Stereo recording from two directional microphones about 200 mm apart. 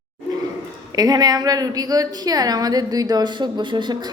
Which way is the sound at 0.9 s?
20° right (ahead or behind).